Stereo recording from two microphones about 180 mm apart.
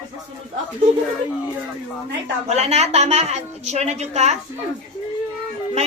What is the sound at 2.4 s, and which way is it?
Speech, 35° right (ahead or behind).